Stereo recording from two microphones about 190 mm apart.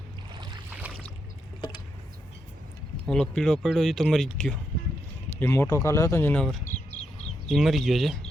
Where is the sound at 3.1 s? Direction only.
5° left (ahead or behind).